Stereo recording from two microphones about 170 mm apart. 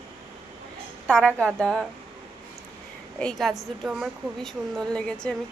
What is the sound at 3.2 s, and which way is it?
Speech, centre (ahead or behind).